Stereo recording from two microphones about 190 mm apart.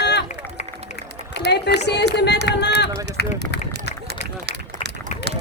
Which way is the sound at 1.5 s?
60° left (ahead or behind).